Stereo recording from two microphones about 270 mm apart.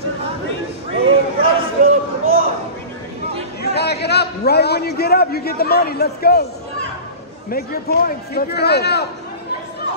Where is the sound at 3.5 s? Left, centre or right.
Left.